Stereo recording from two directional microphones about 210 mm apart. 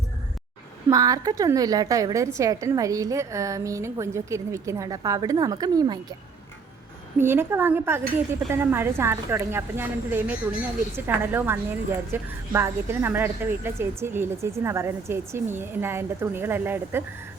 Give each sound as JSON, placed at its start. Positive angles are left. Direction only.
{"t": 0.9, "sound": "a woman's voice", "side_deg": -15}
{"t": 7.2, "sound": "a woman's voice", "side_deg": -10}